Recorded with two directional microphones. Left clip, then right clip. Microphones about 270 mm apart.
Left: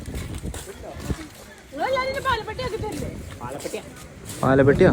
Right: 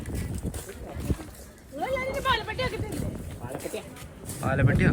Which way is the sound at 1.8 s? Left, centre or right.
Left.